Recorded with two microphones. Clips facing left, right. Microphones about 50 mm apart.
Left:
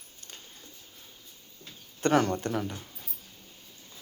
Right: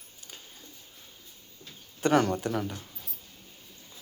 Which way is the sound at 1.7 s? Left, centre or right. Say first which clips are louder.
Right 1 dB; centre.